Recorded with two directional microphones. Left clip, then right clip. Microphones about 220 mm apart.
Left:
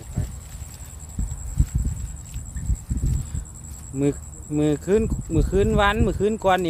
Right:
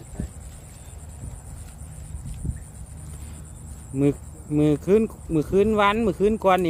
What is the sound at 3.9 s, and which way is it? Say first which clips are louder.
Speech: right 1 dB; 20° right (ahead or behind).